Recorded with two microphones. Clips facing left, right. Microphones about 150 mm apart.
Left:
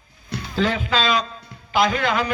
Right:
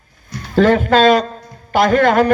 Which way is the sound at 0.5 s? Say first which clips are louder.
Right 10 dB; 50° right (ahead or behind).